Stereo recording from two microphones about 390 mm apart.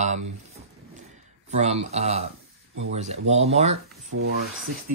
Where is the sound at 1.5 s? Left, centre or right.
Centre.